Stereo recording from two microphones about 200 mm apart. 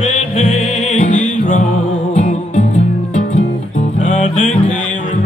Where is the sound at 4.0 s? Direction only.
35° left (ahead or behind).